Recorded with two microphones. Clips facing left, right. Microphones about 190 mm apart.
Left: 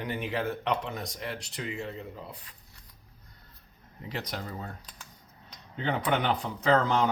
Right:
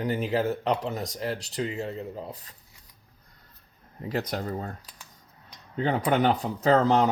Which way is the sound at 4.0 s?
40° right (ahead or behind).